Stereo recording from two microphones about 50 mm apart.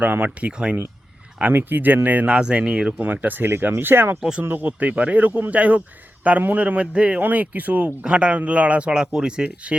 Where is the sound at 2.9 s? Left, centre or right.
Right.